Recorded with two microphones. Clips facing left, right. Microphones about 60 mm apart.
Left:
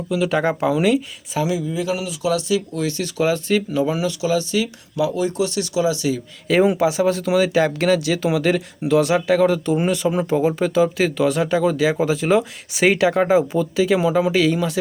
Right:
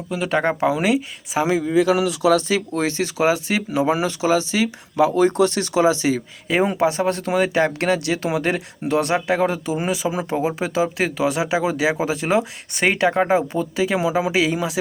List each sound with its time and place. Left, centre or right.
0.1 s speech: centre
1.4 s speech: right
1.6 s speech: right
2.3 s speech: right
2.8 s speech: right
3.3 s speech: centre
3.8 s speech: right
6.5 s speech: centre